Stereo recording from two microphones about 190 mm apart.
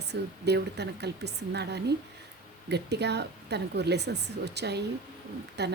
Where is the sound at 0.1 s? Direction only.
60° right (ahead or behind).